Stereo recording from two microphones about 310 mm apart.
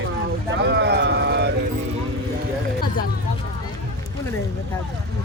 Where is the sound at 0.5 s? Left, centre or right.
Right.